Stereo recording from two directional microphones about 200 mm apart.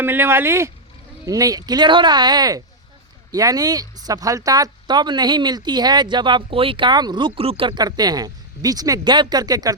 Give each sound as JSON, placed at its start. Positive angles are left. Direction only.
{"t": 0.0, "sound": "speech", "side_deg": -10}